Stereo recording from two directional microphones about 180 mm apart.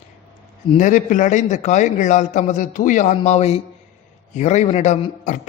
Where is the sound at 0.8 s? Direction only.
45° left (ahead or behind).